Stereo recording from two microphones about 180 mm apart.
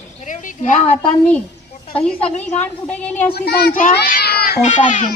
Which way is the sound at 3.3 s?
60° left (ahead or behind).